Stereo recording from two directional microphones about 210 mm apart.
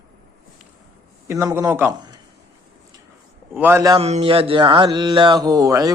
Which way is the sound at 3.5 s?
10° right (ahead or behind).